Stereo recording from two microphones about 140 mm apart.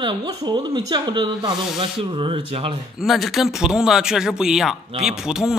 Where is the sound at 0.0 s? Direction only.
30° right (ahead or behind).